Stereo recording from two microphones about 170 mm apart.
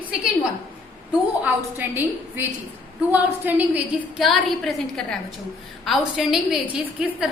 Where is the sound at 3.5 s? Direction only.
10° right (ahead or behind).